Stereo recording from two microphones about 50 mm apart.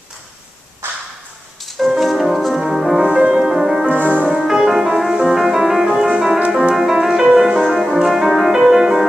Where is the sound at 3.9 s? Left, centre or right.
Right.